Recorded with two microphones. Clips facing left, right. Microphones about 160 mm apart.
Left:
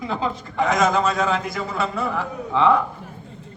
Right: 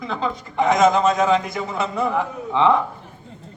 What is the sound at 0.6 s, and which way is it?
A man's voice, 20° right (ahead or behind).